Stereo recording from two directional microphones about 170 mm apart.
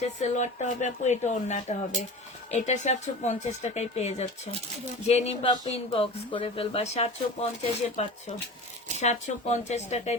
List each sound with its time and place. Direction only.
0.0 s speech: 45° left (ahead or behind)